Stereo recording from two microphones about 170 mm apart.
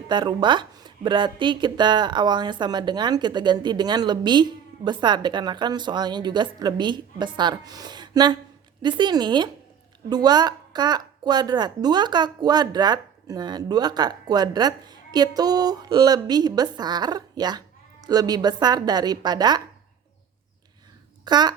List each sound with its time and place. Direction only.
0.1 s speech: 25° right (ahead or behind)
21.2 s a child's voice: 25° right (ahead or behind)